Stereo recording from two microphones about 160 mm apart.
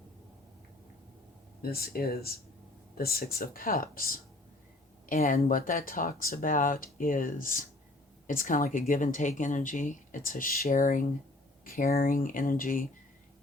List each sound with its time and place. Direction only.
1.6 s speech: 70° left (ahead or behind)